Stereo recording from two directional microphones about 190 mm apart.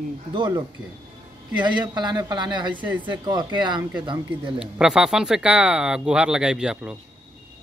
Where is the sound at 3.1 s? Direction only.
20° right (ahead or behind).